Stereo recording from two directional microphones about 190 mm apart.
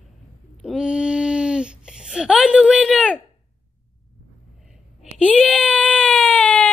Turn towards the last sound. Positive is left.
turn(degrees=5)  # may be behind; listen again after turning